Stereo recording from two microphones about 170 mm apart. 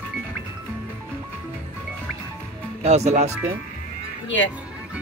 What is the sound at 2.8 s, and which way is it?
Speech, 40° right (ahead or behind).